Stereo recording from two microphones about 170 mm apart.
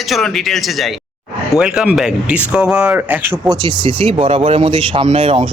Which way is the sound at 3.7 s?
30° right (ahead or behind).